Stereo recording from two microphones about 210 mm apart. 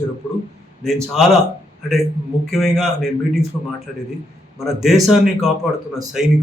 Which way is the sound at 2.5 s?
Centre (ahead or behind).